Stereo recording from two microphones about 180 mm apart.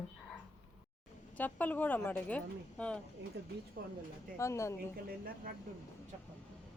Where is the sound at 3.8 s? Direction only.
50° right (ahead or behind).